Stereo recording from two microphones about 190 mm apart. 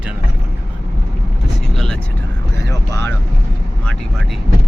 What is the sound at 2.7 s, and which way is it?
Vehicle, 15° left (ahead or behind).